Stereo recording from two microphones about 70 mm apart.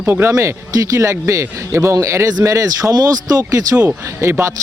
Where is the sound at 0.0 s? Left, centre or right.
Right.